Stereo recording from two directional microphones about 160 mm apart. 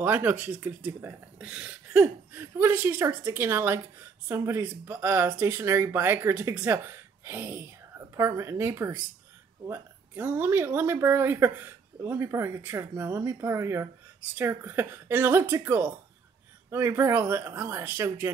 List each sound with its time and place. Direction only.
0.0 s speech: 10° right (ahead or behind)